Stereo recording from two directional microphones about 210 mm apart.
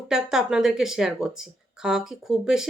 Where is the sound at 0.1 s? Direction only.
5° right (ahead or behind).